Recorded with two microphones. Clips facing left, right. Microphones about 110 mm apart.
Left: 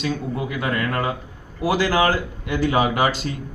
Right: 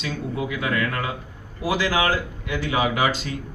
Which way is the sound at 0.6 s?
45° left (ahead or behind).